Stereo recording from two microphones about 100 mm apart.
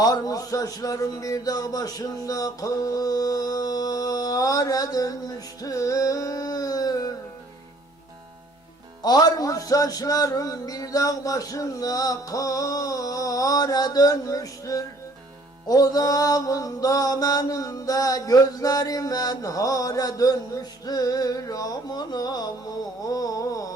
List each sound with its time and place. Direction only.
0.0 s speech: 40° left (ahead or behind)
9.0 s speech: 40° left (ahead or behind)